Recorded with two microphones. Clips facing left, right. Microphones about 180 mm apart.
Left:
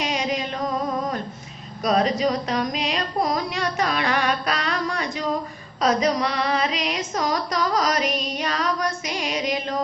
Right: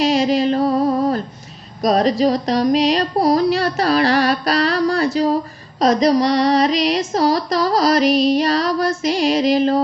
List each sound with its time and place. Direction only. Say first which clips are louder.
0.0 s music: right 10 dB; 35° right (ahead or behind)